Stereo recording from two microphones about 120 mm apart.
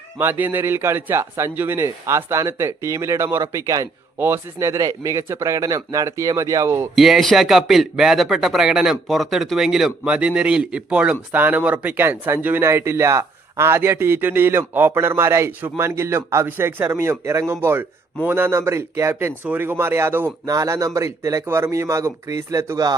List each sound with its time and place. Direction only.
0.2 s a man's voice: 15° right (ahead or behind)
6.9 s a man's voice: centre (ahead or behind); by 23.0 s 30° right (ahead or behind)